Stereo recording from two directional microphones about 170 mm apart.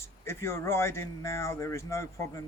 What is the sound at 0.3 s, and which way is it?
Speech, 15° left (ahead or behind).